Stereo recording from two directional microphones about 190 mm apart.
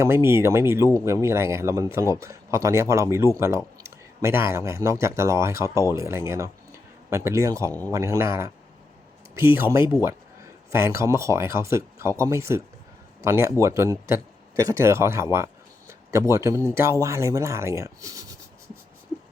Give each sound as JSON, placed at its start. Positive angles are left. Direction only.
{"t": 0.0, "sound": "speech", "side_deg": -15}
{"t": 7.7, "sound": "speech", "side_deg": 10}
{"t": 7.9, "sound": "speech", "side_deg": -15}